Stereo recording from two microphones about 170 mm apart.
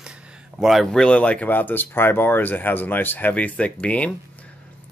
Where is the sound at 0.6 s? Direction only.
Centre (ahead or behind).